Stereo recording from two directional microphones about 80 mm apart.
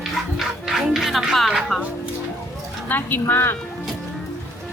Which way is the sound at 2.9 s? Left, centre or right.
Left.